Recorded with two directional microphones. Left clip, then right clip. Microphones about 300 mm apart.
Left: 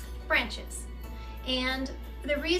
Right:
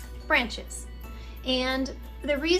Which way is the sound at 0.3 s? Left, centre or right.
Right.